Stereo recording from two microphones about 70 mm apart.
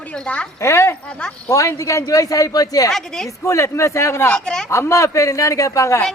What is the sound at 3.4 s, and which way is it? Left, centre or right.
Speech, left.